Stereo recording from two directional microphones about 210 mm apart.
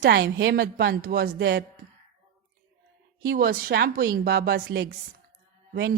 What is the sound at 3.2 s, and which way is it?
A woman's voice, 45° right (ahead or behind).